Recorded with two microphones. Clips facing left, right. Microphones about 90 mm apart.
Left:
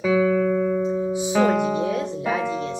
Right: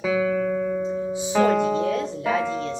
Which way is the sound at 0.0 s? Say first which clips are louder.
Left 3 dB; centre (ahead or behind).